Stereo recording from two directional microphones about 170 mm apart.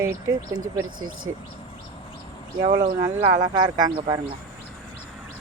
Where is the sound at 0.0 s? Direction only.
15° right (ahead or behind).